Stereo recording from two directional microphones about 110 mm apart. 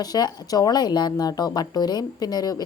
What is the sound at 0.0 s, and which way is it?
A woman's voice, 40° left (ahead or behind).